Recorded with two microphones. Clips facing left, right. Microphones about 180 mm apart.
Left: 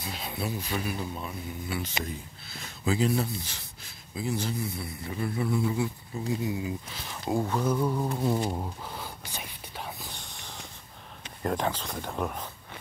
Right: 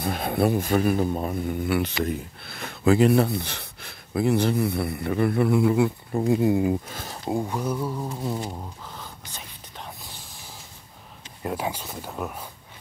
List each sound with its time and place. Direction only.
0.0 s speech: 55° right (ahead or behind)
7.2 s speech: 15° right (ahead or behind)
8.2 s a sound: centre (ahead or behind)
8.5 s whispering: 10° left (ahead or behind)
11.4 s speech: 10° right (ahead or behind)